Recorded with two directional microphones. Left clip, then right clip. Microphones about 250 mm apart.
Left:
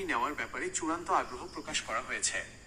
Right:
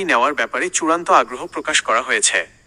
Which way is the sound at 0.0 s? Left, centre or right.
Right.